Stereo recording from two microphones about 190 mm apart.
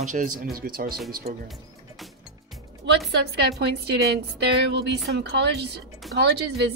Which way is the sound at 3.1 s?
60° right (ahead or behind).